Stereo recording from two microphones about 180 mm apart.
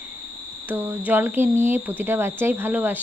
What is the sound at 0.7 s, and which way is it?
Speech, 10° right (ahead or behind).